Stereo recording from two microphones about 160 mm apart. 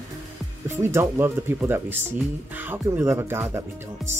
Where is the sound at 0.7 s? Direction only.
15° right (ahead or behind).